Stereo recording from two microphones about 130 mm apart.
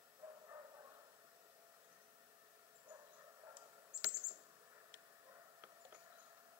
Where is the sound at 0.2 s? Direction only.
15° right (ahead or behind).